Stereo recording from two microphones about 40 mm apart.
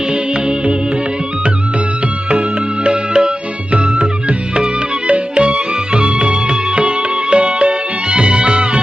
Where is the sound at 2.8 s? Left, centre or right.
Right.